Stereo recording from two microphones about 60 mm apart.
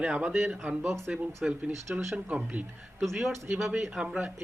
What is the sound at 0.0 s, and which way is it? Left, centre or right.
Speech, right.